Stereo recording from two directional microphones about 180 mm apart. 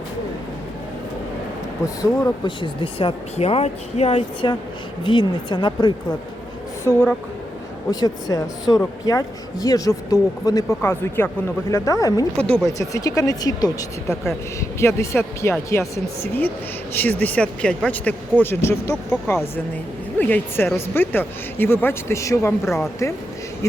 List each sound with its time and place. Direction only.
2.0 s speech: 20° left (ahead or behind)